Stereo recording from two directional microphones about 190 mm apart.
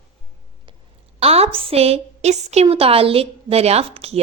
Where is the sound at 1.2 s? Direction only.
30° right (ahead or behind).